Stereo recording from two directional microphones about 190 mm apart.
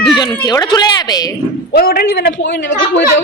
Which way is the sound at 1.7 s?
55° left (ahead or behind).